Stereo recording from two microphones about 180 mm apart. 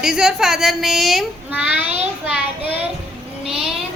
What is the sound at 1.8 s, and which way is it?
Child singing, 35° right (ahead or behind).